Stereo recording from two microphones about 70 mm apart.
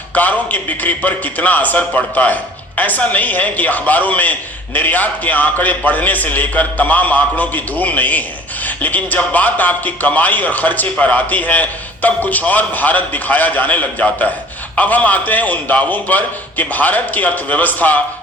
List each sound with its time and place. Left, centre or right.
0.1 s a man's voice: left